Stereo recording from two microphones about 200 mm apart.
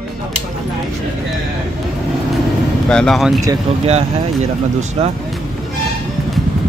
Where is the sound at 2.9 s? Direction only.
5° left (ahead or behind).